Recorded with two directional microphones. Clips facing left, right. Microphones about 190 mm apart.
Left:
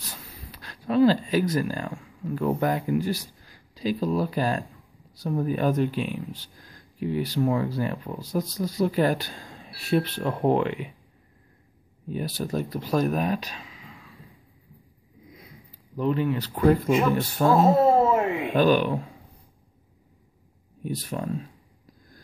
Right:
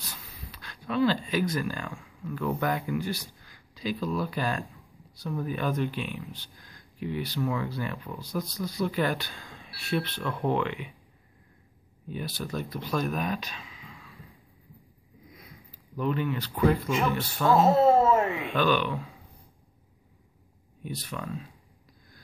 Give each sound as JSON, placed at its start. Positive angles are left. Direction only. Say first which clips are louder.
{"t": 0.0, "sound": "speech", "louder": "left 2 dB", "side_deg": 40}
{"t": 12.1, "sound": "speech", "louder": "left 5 dB", "side_deg": 40}
{"t": 16.0, "sound": "speech", "louder": "left 4 dB", "side_deg": 30}
{"t": 17.8, "sound": "a sound", "louder": "left 1 dB", "side_deg": 15}
{"t": 18.4, "sound": "speech", "louder": "left 5 dB", "side_deg": 40}
{"t": 20.8, "sound": "speech", "louder": "left 6 dB", "side_deg": 40}